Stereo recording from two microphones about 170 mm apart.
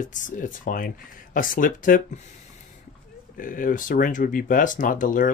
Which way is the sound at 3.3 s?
55° left (ahead or behind).